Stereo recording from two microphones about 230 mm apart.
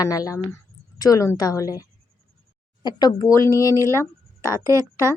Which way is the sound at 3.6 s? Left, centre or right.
Centre.